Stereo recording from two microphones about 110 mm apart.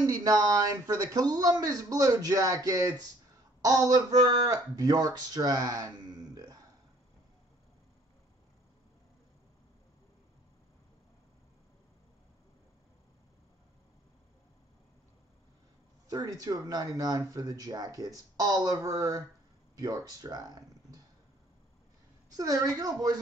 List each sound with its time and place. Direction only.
0.0 s speech: 30° right (ahead or behind)
16.1 s speech: 35° right (ahead or behind)
22.3 s speech: 30° right (ahead or behind)